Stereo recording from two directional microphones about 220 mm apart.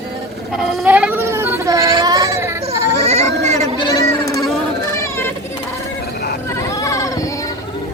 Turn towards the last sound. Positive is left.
turn(degrees=15)  # may be behind; listen again after turning